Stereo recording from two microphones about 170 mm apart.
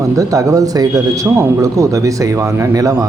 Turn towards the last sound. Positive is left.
turn(degrees=-20)  # may be behind; listen again after turning